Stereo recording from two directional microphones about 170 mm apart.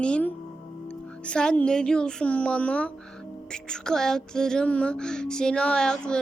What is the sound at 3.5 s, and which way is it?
Music, 5° left (ahead or behind).